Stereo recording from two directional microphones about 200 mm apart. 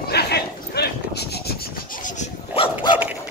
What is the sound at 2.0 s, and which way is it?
Dog, 35° left (ahead or behind).